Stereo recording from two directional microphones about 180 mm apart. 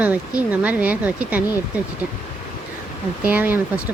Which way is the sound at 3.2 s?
10° right (ahead or behind).